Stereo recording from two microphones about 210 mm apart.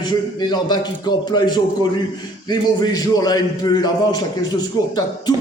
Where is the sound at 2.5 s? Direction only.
20° left (ahead or behind).